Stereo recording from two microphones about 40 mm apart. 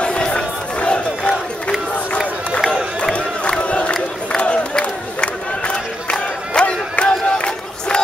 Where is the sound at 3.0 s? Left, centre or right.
Left.